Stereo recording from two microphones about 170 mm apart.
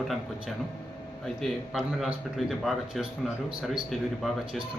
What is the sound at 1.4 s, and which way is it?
Speech, centre (ahead or behind).